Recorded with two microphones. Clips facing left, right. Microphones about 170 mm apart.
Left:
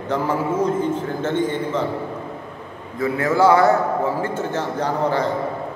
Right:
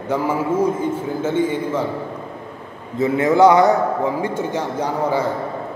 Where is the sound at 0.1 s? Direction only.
10° right (ahead or behind).